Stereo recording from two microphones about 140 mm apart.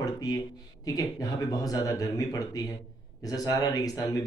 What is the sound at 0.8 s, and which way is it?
Speech, 25° left (ahead or behind).